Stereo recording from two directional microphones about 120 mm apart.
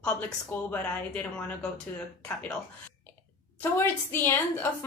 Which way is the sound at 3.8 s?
20° left (ahead or behind).